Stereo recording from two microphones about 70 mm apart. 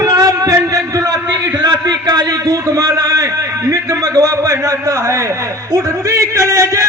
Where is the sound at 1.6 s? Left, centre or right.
Right.